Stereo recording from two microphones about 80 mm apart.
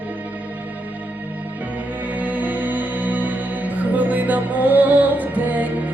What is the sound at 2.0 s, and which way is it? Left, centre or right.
Music, centre.